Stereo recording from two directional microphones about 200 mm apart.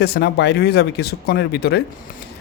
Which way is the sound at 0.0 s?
55° left (ahead or behind).